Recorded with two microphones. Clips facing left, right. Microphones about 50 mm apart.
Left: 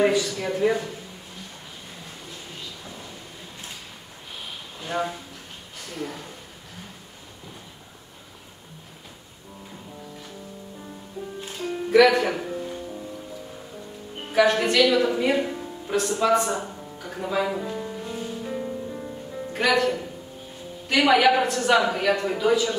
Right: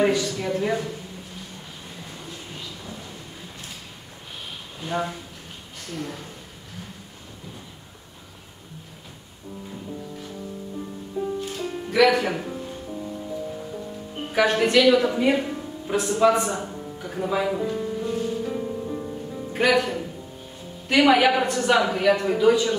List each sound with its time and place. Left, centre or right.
0.0 s a woman's voice: centre
4.7 s a woman's voice: centre
11.2 s music: centre
11.9 s speech: centre
14.3 s a woman's voice: centre
15.9 s music: centre
19.5 s a woman's voice: centre